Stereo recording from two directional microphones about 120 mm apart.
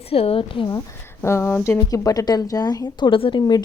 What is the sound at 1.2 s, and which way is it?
A woman's voice, 20° left (ahead or behind).